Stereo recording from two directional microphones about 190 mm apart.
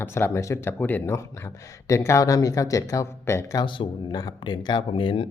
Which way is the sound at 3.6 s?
25° left (ahead or behind).